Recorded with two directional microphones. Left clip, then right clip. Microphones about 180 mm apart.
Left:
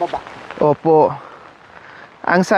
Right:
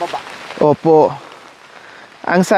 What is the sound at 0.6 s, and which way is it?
Speech, 20° right (ahead or behind).